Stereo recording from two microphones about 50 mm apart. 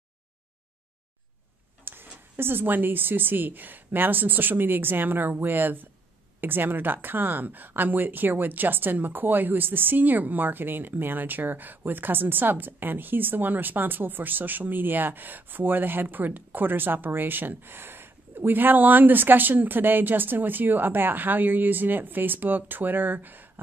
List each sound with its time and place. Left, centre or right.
1.9 s speech: right